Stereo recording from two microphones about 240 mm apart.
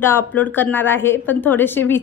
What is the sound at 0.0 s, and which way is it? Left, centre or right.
A woman's voice, centre.